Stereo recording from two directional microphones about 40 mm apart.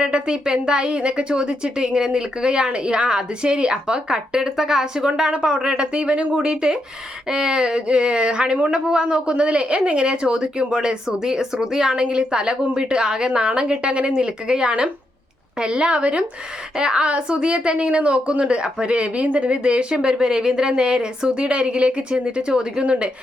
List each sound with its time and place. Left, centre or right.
0.0 s a woman's voice: right